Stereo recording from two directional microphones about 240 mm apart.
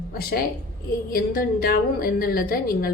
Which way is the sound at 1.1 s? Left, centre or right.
Left.